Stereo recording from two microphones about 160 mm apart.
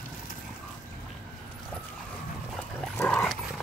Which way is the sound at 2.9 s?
10° left (ahead or behind).